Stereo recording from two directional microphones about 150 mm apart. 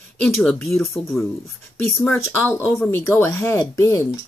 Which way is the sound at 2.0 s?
15° left (ahead or behind).